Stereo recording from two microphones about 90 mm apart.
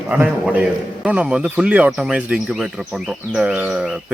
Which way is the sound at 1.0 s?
15° right (ahead or behind).